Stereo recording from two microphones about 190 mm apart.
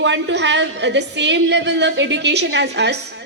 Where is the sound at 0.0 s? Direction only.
70° right (ahead or behind).